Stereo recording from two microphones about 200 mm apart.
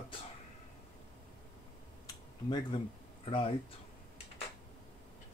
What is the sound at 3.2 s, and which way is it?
Speech, 25° left (ahead or behind).